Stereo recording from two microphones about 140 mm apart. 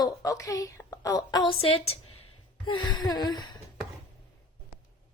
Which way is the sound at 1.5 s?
45° left (ahead or behind).